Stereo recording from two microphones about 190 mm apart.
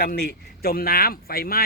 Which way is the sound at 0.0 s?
55° left (ahead or behind).